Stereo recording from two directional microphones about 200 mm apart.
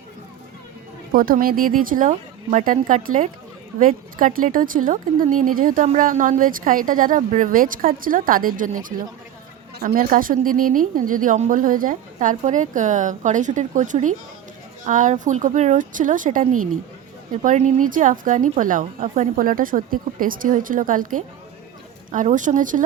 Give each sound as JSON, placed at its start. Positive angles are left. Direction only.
{"t": 1.1, "sound": "a woman's voice", "side_deg": -45}